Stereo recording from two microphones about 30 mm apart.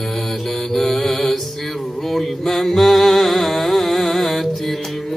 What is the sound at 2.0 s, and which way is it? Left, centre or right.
Music, centre.